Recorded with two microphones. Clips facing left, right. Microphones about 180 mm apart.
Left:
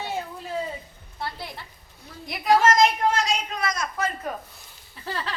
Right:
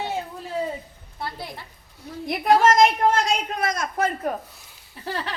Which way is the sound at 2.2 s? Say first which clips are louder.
Right 2 dB; 55° right (ahead or behind).